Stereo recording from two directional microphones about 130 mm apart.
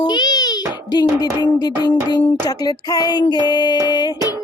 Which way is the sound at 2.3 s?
30° left (ahead or behind).